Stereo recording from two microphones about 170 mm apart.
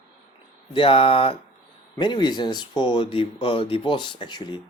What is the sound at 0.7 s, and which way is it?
Speech, 30° left (ahead or behind).